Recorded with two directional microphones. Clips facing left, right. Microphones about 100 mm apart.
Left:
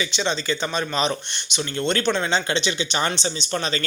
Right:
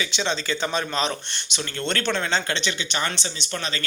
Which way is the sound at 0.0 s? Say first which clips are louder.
Left 2 dB; centre (ahead or behind).